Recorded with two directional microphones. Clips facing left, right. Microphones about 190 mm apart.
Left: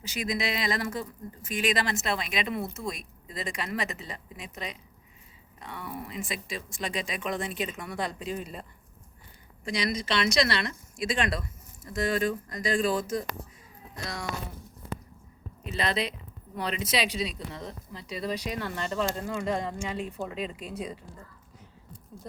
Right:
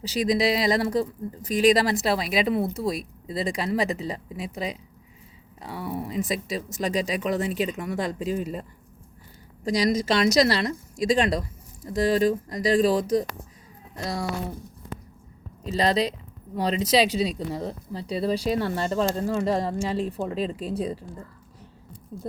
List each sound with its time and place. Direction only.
0.0 s speech: 35° right (ahead or behind)
9.6 s speech: 40° right (ahead or behind)
15.6 s speech: 35° right (ahead or behind)
22.1 s speech: 40° right (ahead or behind)